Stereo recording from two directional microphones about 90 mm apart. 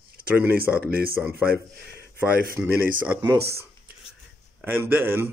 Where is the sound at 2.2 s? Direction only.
20° right (ahead or behind).